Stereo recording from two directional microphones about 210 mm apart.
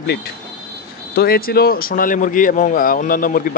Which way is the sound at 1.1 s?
45° left (ahead or behind).